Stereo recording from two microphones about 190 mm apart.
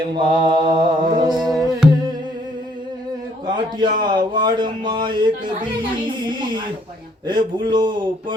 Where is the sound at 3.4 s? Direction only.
25° right (ahead or behind).